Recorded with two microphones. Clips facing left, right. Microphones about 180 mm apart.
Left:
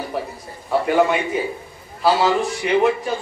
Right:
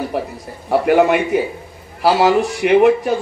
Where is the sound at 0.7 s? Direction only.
65° right (ahead or behind).